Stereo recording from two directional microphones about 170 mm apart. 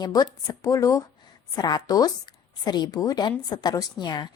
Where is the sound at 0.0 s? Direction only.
20° left (ahead or behind).